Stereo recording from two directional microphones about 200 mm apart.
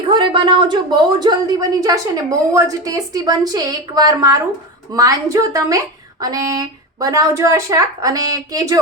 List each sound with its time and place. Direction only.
0.1 s a woman's voice: 25° right (ahead or behind)